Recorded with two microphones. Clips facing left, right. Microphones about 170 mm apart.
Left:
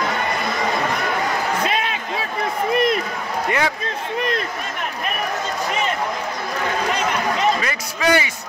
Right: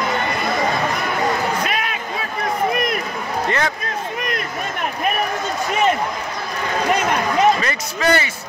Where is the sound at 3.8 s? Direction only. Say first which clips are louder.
Left 1 dB; 30° left (ahead or behind).